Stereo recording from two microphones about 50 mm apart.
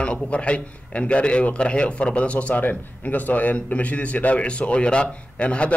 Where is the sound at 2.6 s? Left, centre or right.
Left.